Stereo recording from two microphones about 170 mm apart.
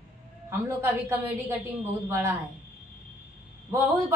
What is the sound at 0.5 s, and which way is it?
Speech, 15° right (ahead or behind).